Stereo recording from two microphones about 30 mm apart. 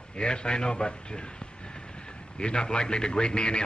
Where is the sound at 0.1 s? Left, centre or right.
Left.